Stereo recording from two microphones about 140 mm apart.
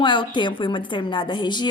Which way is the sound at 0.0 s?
35° left (ahead or behind).